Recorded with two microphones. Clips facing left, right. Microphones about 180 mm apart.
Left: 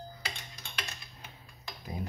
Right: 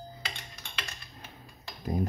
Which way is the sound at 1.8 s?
45° right (ahead or behind).